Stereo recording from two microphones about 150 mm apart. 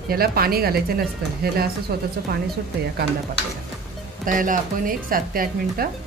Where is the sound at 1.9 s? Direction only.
90° right.